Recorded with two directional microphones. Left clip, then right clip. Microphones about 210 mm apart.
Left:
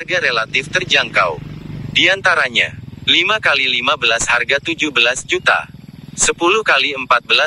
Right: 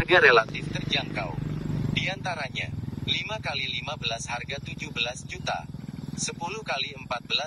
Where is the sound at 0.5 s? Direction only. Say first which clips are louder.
Left 15 dB; 45° left (ahead or behind).